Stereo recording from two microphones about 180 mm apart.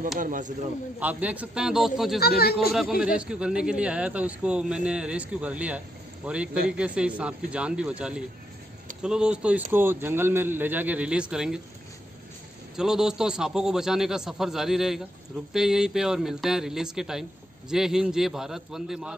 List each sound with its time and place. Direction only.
0.2 s a man's voice: 45° right (ahead or behind)
0.9 s a man's voice: 10° right (ahead or behind)
2.1 s speech: 60° left (ahead or behind)
3.0 s a man's voice: 5° right (ahead or behind)
12.7 s a man's voice: 5° right (ahead or behind)